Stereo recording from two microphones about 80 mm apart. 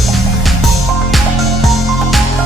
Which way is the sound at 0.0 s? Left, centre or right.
Centre.